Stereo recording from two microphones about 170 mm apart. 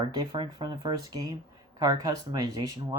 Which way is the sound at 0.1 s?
25° right (ahead or behind).